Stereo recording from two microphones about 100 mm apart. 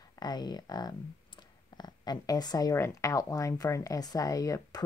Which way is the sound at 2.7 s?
30° left (ahead or behind).